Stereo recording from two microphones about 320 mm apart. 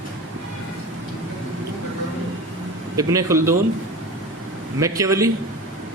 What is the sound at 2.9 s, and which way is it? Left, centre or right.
Speech, centre.